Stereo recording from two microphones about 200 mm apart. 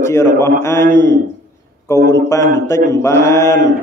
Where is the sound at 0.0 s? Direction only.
15° left (ahead or behind).